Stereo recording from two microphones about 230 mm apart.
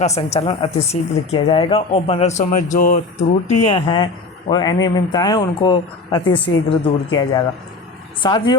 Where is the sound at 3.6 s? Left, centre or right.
Left.